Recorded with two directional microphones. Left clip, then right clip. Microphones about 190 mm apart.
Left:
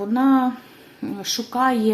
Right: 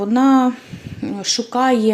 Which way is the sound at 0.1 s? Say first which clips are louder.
Right 4 dB; 35° right (ahead or behind).